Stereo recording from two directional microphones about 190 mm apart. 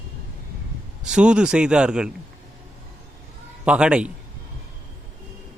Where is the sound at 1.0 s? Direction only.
5° right (ahead or behind).